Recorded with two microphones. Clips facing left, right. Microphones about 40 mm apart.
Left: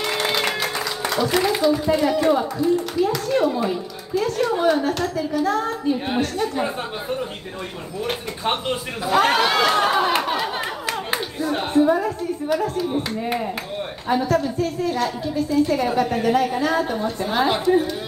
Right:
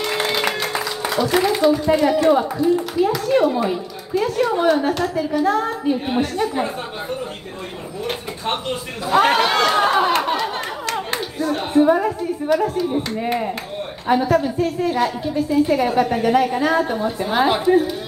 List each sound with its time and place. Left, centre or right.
0.0 s music: centre
2.0 s a woman's voice: centre
8.0 s a sound: centre
11.8 s a woman's voice: centre
12.4 s speech: centre
14.0 s a woman's voice: centre